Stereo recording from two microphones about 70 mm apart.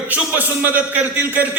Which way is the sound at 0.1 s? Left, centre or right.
Right.